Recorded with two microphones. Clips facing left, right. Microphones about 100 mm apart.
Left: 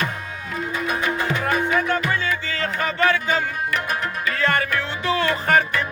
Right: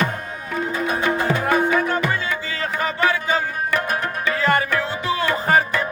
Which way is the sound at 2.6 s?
15° right (ahead or behind).